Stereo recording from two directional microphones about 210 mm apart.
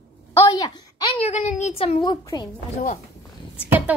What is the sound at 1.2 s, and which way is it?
A woman's voice, 30° left (ahead or behind).